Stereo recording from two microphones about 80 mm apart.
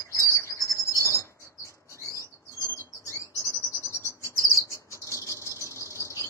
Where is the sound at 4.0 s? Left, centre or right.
Left.